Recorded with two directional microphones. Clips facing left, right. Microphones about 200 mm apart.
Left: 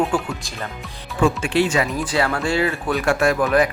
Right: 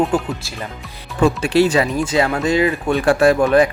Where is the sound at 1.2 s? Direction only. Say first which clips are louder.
Right 4 dB; 40° right (ahead or behind).